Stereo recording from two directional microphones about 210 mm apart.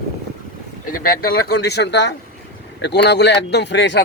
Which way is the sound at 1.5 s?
50° left (ahead or behind).